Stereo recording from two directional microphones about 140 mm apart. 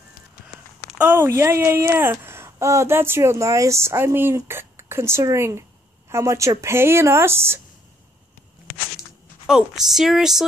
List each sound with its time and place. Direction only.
0.9 s a woman's voice: 15° right (ahead or behind)
9.5 s a woman's voice: 5° right (ahead or behind)